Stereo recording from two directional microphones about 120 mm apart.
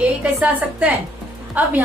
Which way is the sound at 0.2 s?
10° right (ahead or behind).